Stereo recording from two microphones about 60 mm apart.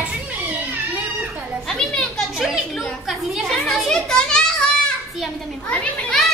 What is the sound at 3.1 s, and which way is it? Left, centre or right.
Children playing, centre.